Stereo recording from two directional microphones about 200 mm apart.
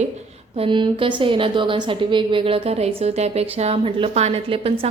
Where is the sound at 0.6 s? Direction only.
25° right (ahead or behind).